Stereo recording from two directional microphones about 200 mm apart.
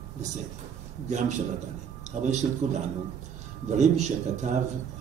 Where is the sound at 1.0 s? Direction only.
35° right (ahead or behind).